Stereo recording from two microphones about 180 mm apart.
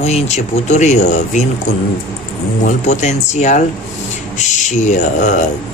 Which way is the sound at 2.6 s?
40° left (ahead or behind).